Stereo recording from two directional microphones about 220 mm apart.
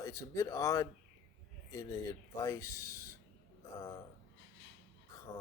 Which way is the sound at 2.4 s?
15° left (ahead or behind).